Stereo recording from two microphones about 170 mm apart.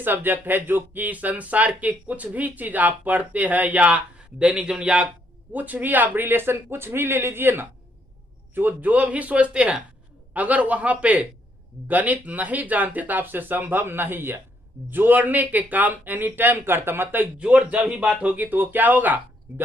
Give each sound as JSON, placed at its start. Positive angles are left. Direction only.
{"t": 0.0, "sound": "speech", "side_deg": -10}